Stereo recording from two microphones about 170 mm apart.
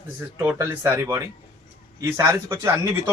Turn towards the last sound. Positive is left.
turn(degrees=-15)  # may be behind; listen again after turning